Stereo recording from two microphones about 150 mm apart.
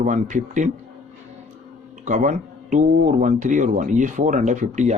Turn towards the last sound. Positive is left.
turn(degrees=-55)  # may be behind; listen again after turning